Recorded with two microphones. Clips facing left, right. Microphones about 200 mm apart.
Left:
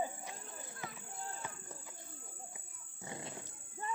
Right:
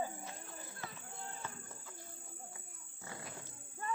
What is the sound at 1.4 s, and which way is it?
Music, 15° left (ahead or behind).